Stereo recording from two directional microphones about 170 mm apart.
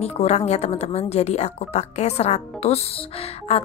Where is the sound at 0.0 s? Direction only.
40° left (ahead or behind).